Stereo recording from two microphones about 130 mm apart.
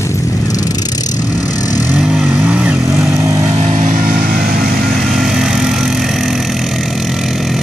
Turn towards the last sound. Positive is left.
turn(degrees=0)  # may be behind; listen again after turning